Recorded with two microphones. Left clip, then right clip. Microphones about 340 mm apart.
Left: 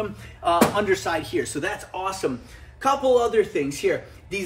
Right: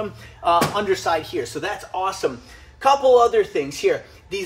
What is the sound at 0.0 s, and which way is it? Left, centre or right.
A woman's voice, centre.